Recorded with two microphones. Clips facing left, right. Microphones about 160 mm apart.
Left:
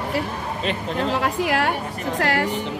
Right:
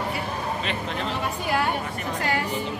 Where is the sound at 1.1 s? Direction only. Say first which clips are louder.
Left 4 dB; 90° left.